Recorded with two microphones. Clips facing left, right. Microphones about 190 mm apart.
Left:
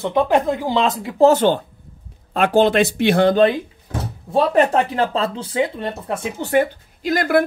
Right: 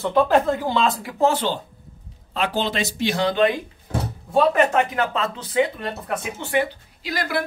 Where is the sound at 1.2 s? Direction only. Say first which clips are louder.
Left 7 dB; 45° left (ahead or behind).